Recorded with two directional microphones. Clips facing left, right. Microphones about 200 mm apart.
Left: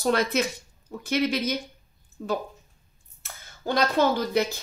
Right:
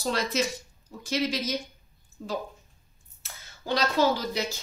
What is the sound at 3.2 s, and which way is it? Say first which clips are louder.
Speech: left 6 dB; 55° left (ahead or behind).